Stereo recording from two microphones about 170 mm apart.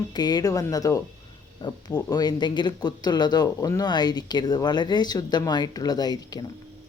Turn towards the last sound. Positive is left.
turn(degrees=25)  # may be behind; listen again after turning